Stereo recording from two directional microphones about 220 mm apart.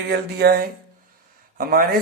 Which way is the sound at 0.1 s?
45° right (ahead or behind).